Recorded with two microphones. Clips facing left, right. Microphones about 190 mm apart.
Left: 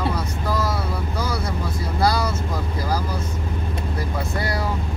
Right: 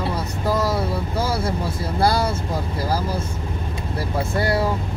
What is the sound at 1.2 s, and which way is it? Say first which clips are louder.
Vehicle: right 4 dB; 30° right (ahead or behind).